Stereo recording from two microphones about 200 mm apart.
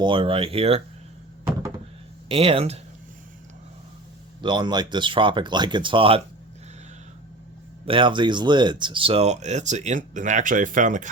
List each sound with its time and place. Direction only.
0.0 s speech: 25° right (ahead or behind)
2.3 s speech: 25° right (ahead or behind)
4.4 s speech: 25° right (ahead or behind)
7.9 s speech: 25° right (ahead or behind)